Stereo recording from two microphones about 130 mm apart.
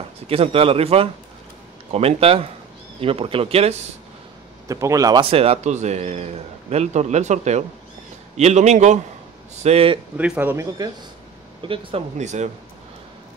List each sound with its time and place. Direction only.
0.3 s speech: 45° right (ahead or behind)
4.6 s a man's voice: 25° right (ahead or behind)
5.2 s a man's voice: 50° right (ahead or behind); by 9.0 s 65° right (ahead or behind)
9.6 s speech: 50° right (ahead or behind)
10.1 s a man's voice: 10° right (ahead or behind)
11.6 s speech: 45° right (ahead or behind)
12.2 s a man's voice: 60° right (ahead or behind)